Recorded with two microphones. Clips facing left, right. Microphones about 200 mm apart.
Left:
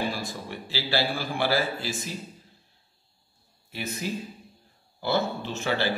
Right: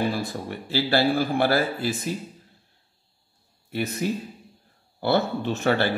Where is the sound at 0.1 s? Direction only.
60° right (ahead or behind).